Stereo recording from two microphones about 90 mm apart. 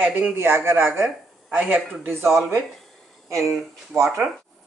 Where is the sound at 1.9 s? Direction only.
25° right (ahead or behind).